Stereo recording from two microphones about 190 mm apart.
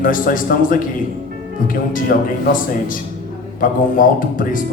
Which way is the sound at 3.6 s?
45° left (ahead or behind).